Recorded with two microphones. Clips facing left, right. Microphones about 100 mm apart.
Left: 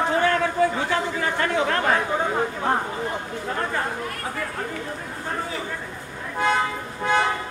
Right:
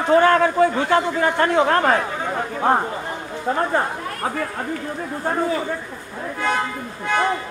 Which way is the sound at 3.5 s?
35° right (ahead or behind).